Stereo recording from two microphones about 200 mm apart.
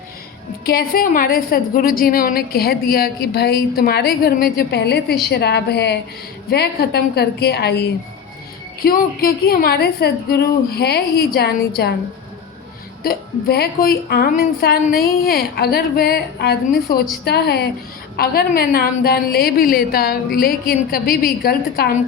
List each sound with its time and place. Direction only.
0.6 s a woman's voice: 50° left (ahead or behind)
13.0 s a woman's voice: 50° left (ahead or behind)